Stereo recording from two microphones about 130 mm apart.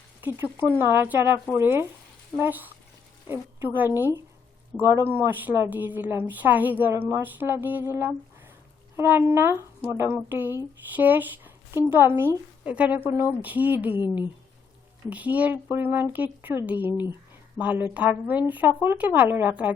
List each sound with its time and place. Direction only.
0.2 s a woman's voice: 15° right (ahead or behind)
3.8 s a woman's voice: 15° right (ahead or behind)
15.1 s a woman's voice: 10° right (ahead or behind)